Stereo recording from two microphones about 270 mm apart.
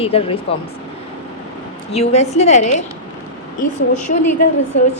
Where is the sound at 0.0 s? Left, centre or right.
Left.